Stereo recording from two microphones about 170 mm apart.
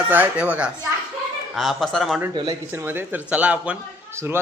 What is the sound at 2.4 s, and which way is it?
Speech, 20° right (ahead or behind).